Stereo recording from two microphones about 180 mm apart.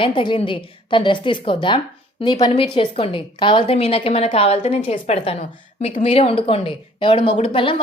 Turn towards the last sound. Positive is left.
turn(degrees=30)  # may be behind; listen again after turning